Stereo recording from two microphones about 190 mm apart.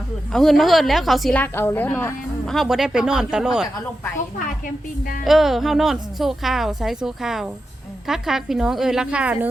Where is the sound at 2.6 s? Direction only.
Centre (ahead or behind).